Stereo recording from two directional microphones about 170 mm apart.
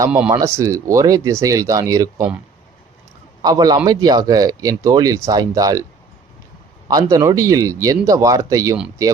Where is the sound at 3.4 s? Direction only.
20° right (ahead or behind).